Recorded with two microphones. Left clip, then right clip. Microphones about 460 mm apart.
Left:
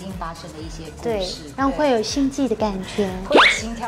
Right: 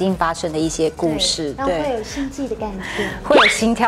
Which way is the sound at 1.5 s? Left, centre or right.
Left.